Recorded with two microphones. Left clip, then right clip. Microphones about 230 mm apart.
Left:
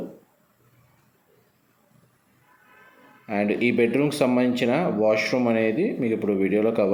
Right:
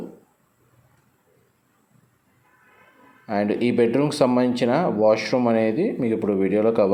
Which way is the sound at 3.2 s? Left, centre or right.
Centre.